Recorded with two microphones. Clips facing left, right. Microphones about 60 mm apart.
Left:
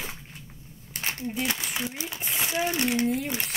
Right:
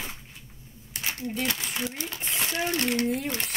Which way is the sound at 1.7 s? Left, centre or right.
Centre.